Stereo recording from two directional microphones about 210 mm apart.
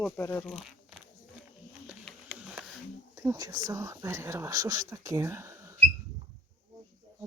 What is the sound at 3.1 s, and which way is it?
Speech, 15° right (ahead or behind).